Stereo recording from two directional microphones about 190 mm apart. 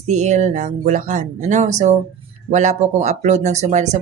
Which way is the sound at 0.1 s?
40° right (ahead or behind).